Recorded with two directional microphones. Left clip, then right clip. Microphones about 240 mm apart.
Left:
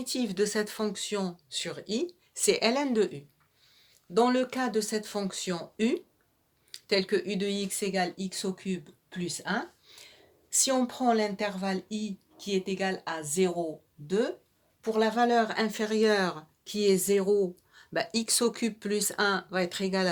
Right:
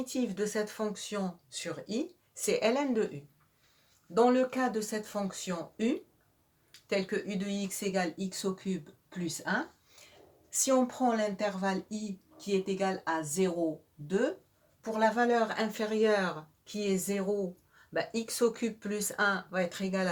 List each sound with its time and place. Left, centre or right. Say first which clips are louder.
0.0 s speech: left 4 dB; left
4.1 s speech: even; left